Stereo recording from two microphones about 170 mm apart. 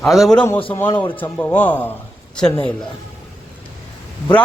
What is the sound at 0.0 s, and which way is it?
A man's voice, centre (ahead or behind).